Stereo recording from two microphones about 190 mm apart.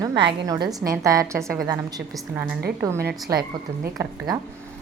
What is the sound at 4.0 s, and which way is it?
Speech, 15° right (ahead or behind).